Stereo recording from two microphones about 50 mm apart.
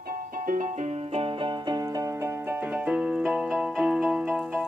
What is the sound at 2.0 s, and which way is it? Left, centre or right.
Music, right.